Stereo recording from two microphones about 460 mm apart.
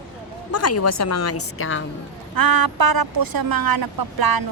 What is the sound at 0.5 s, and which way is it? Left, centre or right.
A woman's voice, left.